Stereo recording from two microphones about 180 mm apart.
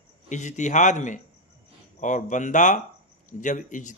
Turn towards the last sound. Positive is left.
turn(degrees=45)  # may be behind; listen again after turning